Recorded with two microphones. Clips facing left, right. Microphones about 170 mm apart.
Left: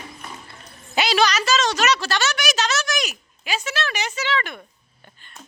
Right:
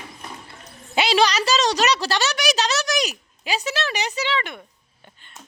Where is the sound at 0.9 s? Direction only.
25° right (ahead or behind).